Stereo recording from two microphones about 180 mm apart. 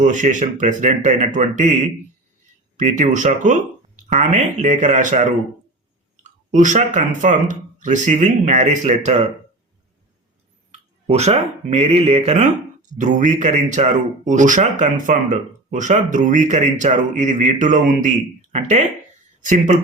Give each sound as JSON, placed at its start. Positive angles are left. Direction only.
{"t": 0.0, "sound": "speech", "side_deg": -45}
{"t": 2.7, "sound": "speech", "side_deg": -45}
{"t": 6.2, "sound": "a sound", "side_deg": -45}
{"t": 7.2, "sound": "speech", "side_deg": -45}
{"t": 10.7, "sound": "speech", "side_deg": -35}